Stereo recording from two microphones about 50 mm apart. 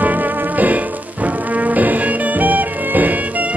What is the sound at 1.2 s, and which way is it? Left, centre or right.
Music, right.